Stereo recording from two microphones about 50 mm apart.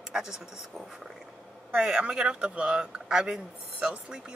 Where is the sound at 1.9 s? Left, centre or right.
Centre.